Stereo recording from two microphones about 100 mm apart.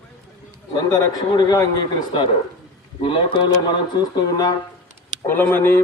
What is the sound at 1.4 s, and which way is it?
Speech, 45° left (ahead or behind).